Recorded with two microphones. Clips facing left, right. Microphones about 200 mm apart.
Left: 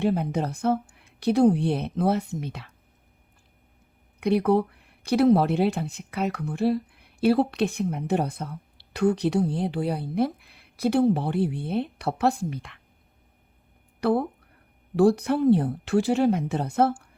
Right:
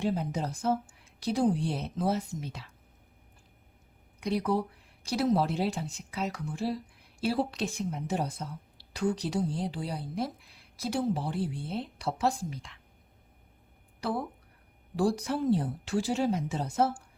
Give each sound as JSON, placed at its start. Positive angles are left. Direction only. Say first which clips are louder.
{"t": 0.0, "sound": "speech", "louder": "left 6 dB", "side_deg": 60}
{"t": 4.2, "sound": "speech", "louder": "left 8 dB", "side_deg": 60}
{"t": 14.0, "sound": "speech", "louder": "left 9 dB", "side_deg": 60}